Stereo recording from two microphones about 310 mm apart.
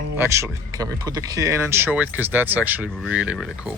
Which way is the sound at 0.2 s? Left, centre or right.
Centre.